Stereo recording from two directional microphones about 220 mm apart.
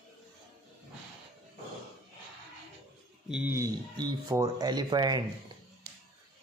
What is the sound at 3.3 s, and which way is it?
Speech, 5° right (ahead or behind).